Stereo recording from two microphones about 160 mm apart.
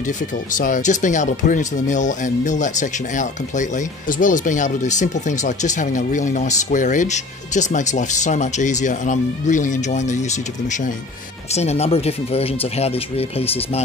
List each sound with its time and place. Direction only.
0.6 s speech: 55° left (ahead or behind)
11.5 s speech: 40° left (ahead or behind)